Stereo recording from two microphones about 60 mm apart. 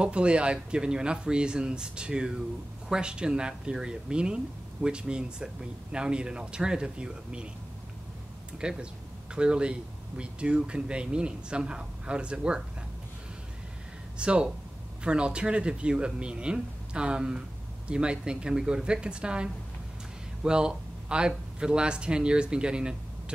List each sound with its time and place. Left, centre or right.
0.0 s speech: centre
8.5 s speech: centre
14.1 s speech: centre